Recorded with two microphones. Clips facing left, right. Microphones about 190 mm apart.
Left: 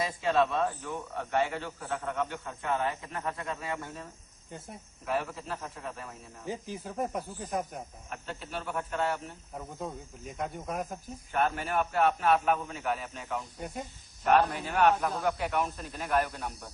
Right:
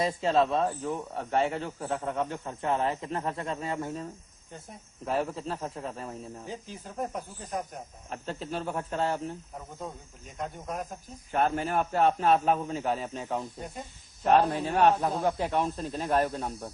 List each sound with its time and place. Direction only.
0.0 s a man's voice: 25° right (ahead or behind)
5.0 s a man's voice: 30° right (ahead or behind)
6.5 s speech: 10° left (ahead or behind)
8.1 s a man's voice: 30° right (ahead or behind)
10.3 s speech: 5° left (ahead or behind)
11.3 s a man's voice: 30° right (ahead or behind)